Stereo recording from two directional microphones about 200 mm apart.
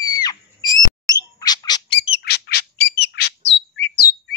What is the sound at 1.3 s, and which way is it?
Bird, 20° left (ahead or behind).